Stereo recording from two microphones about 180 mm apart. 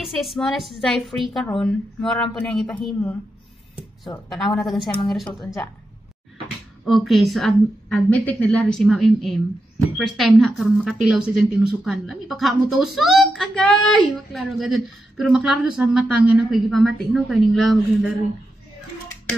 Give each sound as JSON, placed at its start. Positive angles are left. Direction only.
{"t": 0.0, "sound": "a woman's voice", "side_deg": 0}
{"t": 4.3, "sound": "a woman's voice", "side_deg": 0}
{"t": 6.8, "sound": "a woman's voice", "side_deg": 0}